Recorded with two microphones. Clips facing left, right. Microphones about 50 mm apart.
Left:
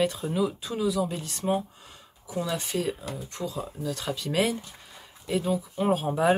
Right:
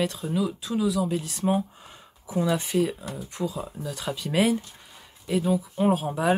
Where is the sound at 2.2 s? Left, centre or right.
Centre.